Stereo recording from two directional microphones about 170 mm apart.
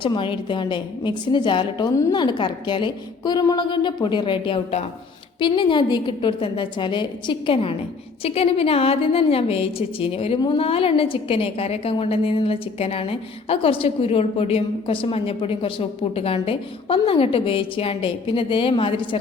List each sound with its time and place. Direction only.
0.0 s a woman's voice: 30° left (ahead or behind)